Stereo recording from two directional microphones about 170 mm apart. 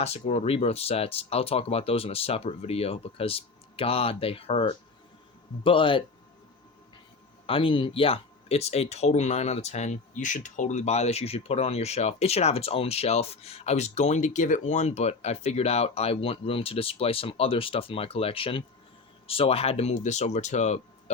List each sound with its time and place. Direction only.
0.0 s speech: 40° left (ahead or behind)
7.4 s speech: 30° left (ahead or behind)